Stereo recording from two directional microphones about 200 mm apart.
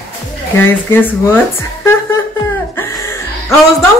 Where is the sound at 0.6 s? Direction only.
10° left (ahead or behind).